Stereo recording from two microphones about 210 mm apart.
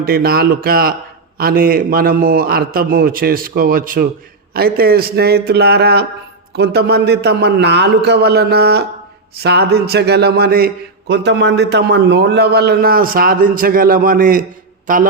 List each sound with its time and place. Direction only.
0.0 s a man's voice: 45° right (ahead or behind)